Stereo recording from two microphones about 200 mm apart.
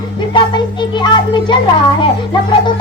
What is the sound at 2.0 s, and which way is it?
Speech, 25° left (ahead or behind).